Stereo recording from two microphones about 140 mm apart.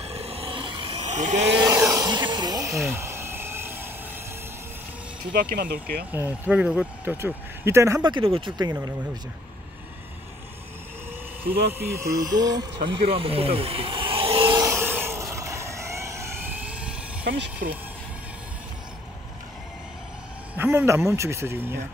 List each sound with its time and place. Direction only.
0.0 s a sound: 45° right (ahead or behind)
1.1 s speech: 55° right (ahead or behind)
1.6 s a sound: 25° right (ahead or behind)
2.0 s hiss: 30° right (ahead or behind)
2.9 s a sound: 20° right (ahead or behind)
5.3 s speech: 90° right
6.1 s speech: 15° right (ahead or behind)
7.2 s speech: 20° right (ahead or behind)
8.0 s speech: 35° right (ahead or behind)
11.4 s speech: 20° right (ahead or behind); by 14.6 s 40° right (ahead or behind)
14.6 s a sound: 15° right (ahead or behind)
15.3 s vehicle: 20° right (ahead or behind)
20.5 s speech: 15° right (ahead or behind)